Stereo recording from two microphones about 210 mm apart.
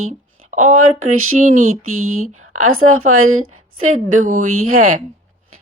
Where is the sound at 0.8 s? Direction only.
90° right.